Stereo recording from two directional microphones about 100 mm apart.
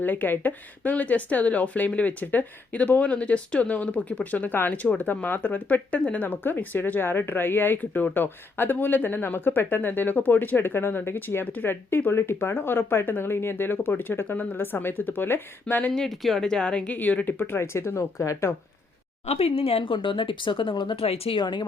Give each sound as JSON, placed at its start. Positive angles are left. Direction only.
{"t": 0.0, "sound": "speech", "side_deg": 20}
{"t": 15.9, "sound": "speech", "side_deg": 0}
{"t": 19.2, "sound": "speech", "side_deg": 90}
{"t": 21.0, "sound": "speech", "side_deg": 80}
{"t": 21.3, "sound": "speech", "side_deg": 50}